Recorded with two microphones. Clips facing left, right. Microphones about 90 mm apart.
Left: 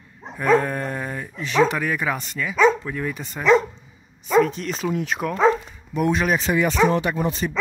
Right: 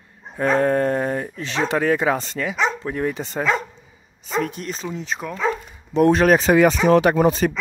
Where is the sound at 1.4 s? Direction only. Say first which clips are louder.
Left 2 dB; 30° right (ahead or behind).